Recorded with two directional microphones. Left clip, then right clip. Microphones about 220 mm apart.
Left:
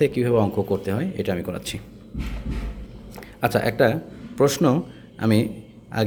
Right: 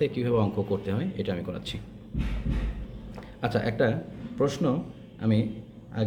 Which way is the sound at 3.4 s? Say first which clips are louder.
Left 7 dB; 35° left (ahead or behind).